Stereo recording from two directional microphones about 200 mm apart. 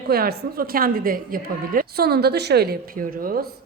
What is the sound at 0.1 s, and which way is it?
A woman's voice, 50° right (ahead or behind).